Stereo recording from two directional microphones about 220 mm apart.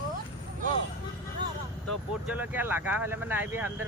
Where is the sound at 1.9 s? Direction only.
5° right (ahead or behind).